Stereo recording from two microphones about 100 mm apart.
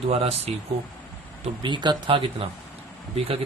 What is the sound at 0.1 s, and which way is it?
Speech, 90° right.